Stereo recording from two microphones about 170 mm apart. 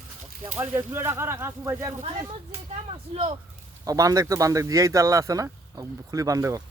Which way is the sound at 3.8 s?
20° right (ahead or behind).